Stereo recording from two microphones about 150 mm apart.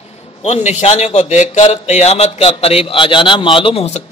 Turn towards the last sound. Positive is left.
turn(degrees=40)  # may be behind; listen again after turning